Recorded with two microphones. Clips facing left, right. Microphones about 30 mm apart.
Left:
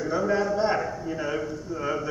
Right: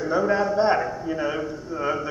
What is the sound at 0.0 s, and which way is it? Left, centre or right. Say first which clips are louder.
A man's voice: right 3 dB; centre.